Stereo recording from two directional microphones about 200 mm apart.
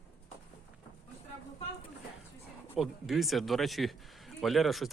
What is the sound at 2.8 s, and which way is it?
A man's voice, centre (ahead or behind).